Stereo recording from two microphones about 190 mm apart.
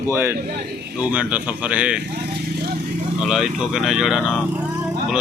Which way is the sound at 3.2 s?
Centre (ahead or behind).